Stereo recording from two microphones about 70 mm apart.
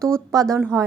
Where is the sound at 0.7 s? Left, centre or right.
Right.